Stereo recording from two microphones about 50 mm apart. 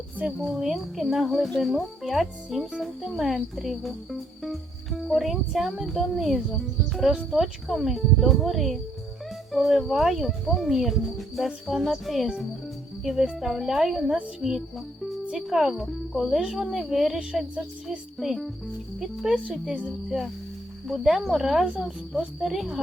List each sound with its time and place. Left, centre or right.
0.3 s speech: centre
15.4 s speech: centre
16.4 s speech: centre
18.2 s speech: centre